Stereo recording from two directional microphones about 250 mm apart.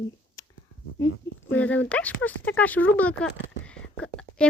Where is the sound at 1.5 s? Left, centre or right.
Centre.